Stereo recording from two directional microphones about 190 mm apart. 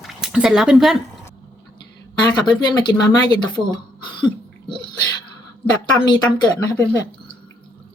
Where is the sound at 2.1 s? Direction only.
20° left (ahead or behind).